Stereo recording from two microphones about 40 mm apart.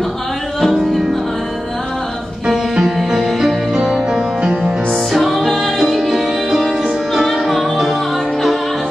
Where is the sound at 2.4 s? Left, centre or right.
Centre.